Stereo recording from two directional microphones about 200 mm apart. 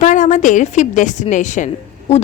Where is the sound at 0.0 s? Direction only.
40° left (ahead or behind).